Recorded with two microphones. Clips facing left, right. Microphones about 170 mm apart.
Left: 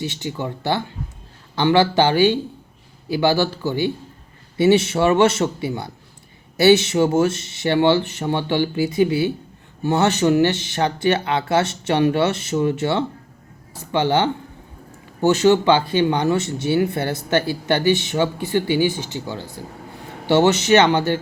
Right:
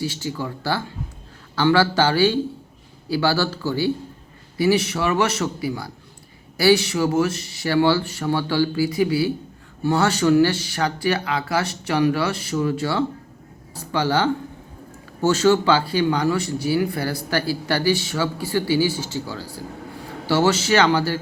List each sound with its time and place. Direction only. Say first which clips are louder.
0.0 s speech: even; 20° left (ahead or behind)